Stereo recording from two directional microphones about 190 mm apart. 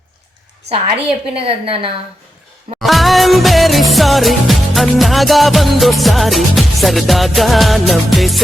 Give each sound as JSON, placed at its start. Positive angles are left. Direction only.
{"t": 1.3, "sound": "a woman's voice", "side_deg": -30}
{"t": 2.8, "sound": "music", "side_deg": 0}